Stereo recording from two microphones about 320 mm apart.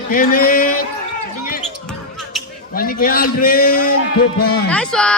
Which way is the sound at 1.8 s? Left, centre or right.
Centre.